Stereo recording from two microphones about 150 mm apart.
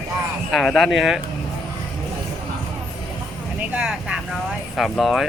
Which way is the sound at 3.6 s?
5° right (ahead or behind).